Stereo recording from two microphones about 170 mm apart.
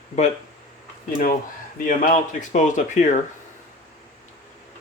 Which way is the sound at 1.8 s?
50° left (ahead or behind).